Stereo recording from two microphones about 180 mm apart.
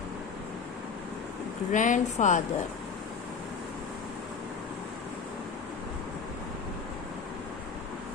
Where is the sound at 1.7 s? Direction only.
45° left (ahead or behind).